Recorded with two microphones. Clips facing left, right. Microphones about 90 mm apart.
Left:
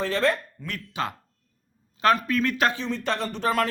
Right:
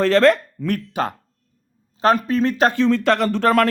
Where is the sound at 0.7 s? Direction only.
45° right (ahead or behind).